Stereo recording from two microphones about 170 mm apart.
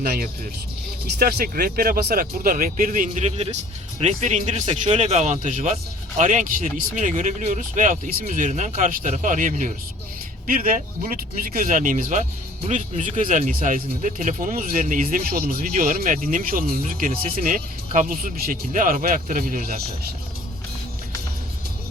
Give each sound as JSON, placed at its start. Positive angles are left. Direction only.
{"t": 0.0, "sound": "speech", "side_deg": -60}